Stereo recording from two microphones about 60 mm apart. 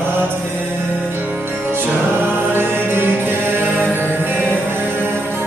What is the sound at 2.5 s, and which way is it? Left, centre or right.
Mantra, right.